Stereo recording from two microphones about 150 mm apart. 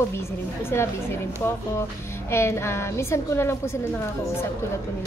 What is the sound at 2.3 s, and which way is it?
A woman's voice, 15° left (ahead or behind).